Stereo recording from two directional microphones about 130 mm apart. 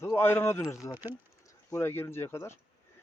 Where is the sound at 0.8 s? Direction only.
10° right (ahead or behind).